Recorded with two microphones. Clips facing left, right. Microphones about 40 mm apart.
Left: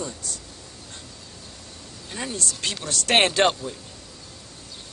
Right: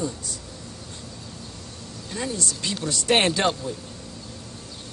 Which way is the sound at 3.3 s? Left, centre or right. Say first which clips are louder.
Left 3 dB; left.